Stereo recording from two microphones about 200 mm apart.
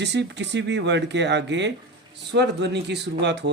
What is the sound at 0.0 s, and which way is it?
Speech, 60° right (ahead or behind).